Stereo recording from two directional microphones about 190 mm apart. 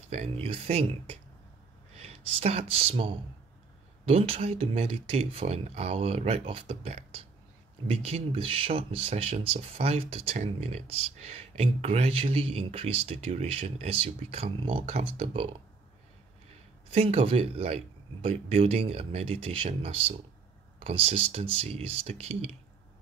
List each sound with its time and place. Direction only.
0.1 s speech: 30° right (ahead or behind)
16.9 s speech: 30° right (ahead or behind)